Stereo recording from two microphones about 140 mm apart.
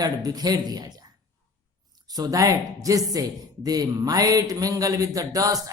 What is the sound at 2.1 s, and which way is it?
Speech, 25° right (ahead or behind).